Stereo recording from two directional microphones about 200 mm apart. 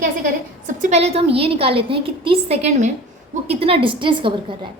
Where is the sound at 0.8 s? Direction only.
35° right (ahead or behind).